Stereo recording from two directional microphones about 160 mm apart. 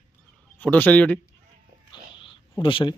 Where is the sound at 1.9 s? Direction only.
30° left (ahead or behind).